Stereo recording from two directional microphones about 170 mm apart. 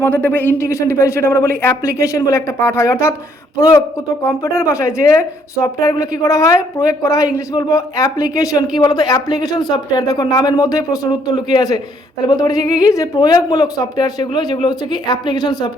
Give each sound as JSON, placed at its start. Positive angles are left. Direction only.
{"t": 0.0, "sound": "a woman's voice", "side_deg": 10}